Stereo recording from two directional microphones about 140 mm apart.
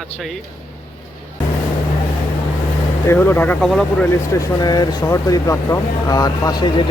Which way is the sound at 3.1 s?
15° left (ahead or behind).